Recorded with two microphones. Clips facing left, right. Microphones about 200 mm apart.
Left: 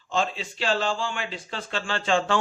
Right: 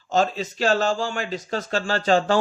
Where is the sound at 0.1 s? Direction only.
45° right (ahead or behind).